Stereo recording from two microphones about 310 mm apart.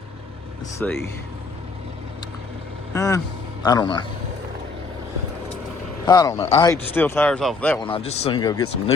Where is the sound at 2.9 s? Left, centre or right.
Centre.